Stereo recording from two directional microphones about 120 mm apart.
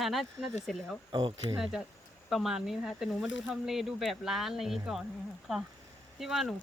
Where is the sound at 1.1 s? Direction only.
35° right (ahead or behind).